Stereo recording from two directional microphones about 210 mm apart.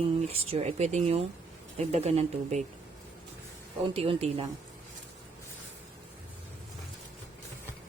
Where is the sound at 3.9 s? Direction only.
25° right (ahead or behind).